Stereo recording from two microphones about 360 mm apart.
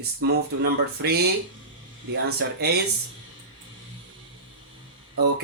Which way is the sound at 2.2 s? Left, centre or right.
Right.